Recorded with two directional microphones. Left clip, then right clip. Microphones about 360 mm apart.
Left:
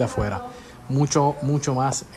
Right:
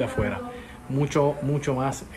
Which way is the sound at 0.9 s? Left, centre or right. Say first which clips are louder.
Left 2 dB; centre.